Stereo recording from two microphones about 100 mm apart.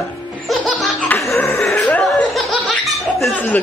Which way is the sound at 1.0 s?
20° left (ahead or behind).